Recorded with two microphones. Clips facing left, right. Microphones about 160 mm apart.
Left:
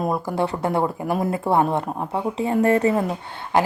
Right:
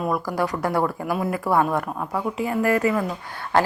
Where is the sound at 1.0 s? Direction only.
40° left (ahead or behind).